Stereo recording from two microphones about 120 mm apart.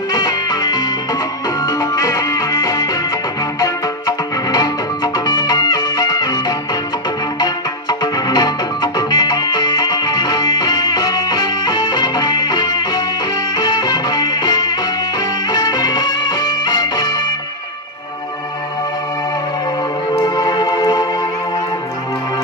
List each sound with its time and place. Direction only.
0.1 s music: 35° left (ahead or behind)
20.2 s music: 35° left (ahead or behind)